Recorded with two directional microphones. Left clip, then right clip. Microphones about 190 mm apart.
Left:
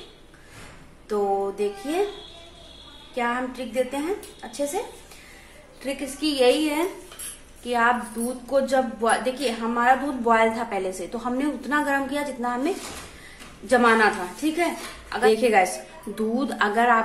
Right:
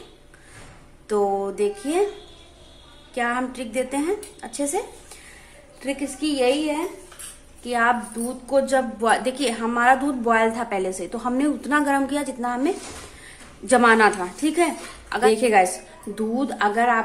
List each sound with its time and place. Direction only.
1.0 s a woman's voice: 25° right (ahead or behind)
3.2 s a woman's voice: 25° right (ahead or behind)
7.6 s a woman's voice: 20° right (ahead or behind)